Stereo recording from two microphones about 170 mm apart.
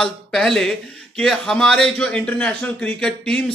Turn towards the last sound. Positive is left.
turn(degrees=5)  # may be behind; listen again after turning